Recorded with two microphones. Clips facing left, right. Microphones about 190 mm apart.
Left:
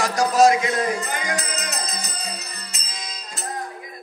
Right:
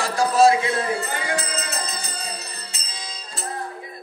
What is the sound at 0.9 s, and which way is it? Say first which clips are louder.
Music: right 1 dB; 30° right (ahead or behind).